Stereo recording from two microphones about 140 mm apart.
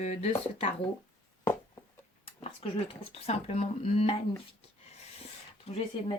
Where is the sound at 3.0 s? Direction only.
50° left (ahead or behind).